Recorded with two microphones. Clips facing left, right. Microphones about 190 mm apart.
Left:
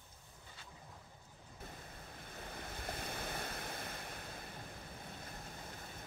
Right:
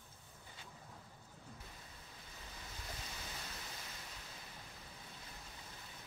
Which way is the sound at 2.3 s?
55° left (ahead or behind).